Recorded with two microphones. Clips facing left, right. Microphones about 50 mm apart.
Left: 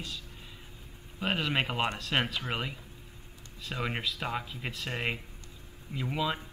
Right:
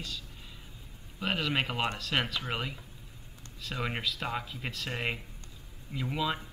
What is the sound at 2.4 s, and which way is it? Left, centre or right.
Speech, centre.